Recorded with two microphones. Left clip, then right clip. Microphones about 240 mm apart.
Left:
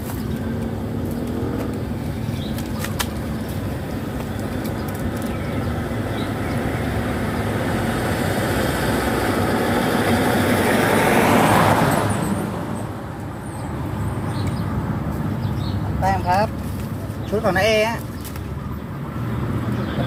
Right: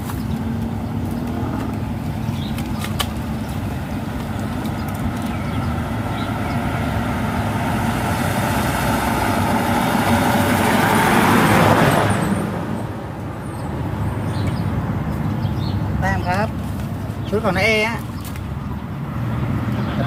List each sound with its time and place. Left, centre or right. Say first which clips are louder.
8.4 s vehicle: right 1 dB; right
11.9 s a sound: right 3 dB; centre
16.0 s vehicle: left 3 dB; centre
17.4 s speech: even; centre